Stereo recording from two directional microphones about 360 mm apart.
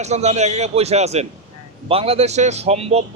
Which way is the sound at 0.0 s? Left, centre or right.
Centre.